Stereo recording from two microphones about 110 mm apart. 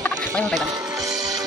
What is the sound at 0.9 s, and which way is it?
Music, 30° right (ahead or behind).